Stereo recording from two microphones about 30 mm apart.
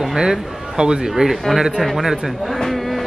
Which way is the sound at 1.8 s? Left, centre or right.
Centre.